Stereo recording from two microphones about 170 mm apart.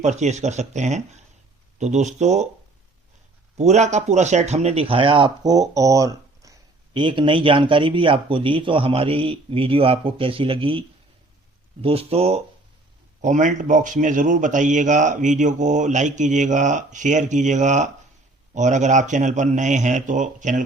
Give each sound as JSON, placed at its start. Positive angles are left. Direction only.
{"t": 0.0, "sound": "a man's voice", "side_deg": -45}
{"t": 3.6, "sound": "speech", "side_deg": -40}
{"t": 13.2, "sound": "a man's voice", "side_deg": -45}